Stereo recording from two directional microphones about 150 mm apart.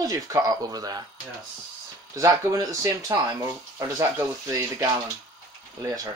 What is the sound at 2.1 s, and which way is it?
Speech, 25° right (ahead or behind).